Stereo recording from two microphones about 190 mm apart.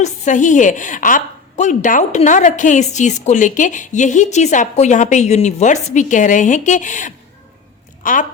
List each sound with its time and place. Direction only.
0.0 s a woman's voice: 40° left (ahead or behind)